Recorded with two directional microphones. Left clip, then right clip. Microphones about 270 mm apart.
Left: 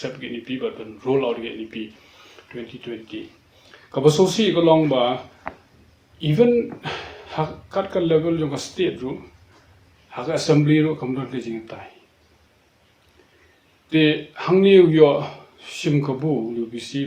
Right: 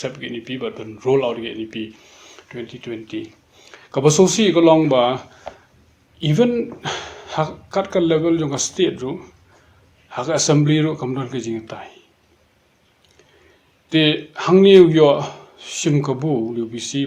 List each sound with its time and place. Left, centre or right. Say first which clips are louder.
0.0 s speech: right 3 dB; right
6.2 s speech: left 1 dB; right
13.9 s speech: right 2 dB; right